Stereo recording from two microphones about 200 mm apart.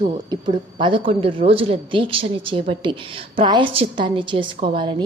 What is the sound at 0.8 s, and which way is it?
A woman's voice, 25° right (ahead or behind).